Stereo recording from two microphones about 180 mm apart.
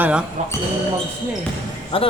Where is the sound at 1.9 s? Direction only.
30° left (ahead or behind).